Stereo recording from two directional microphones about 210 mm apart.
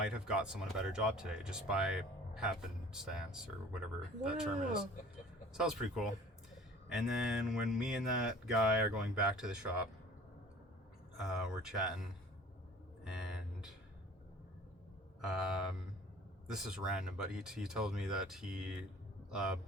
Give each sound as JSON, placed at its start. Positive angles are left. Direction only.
{"t": 0.0, "sound": "speech", "side_deg": -5}
{"t": 5.5, "sound": "speech", "side_deg": 0}
{"t": 11.2, "sound": "speech", "side_deg": 0}
{"t": 13.1, "sound": "a sound", "side_deg": -5}
{"t": 15.2, "sound": "speech", "side_deg": -5}